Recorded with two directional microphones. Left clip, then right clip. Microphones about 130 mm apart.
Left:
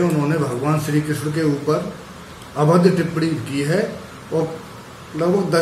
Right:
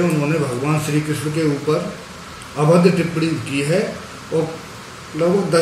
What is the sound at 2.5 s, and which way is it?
Speech, 15° left (ahead or behind).